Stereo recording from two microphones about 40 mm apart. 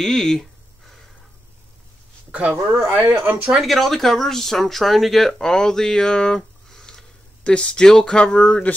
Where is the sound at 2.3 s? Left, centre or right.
Right.